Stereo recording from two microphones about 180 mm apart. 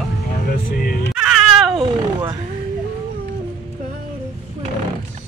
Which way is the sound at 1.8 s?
25° right (ahead or behind).